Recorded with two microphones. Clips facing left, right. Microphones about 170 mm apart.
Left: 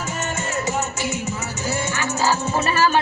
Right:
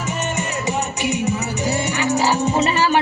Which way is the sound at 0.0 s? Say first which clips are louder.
Right 3 dB; 20° right (ahead or behind).